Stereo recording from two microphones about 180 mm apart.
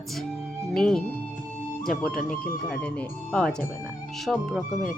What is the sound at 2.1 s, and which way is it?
Speech, 50° left (ahead or behind).